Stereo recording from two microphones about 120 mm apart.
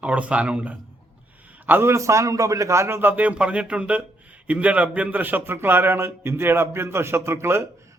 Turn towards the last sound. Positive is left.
turn(degrees=-20)  # may be behind; listen again after turning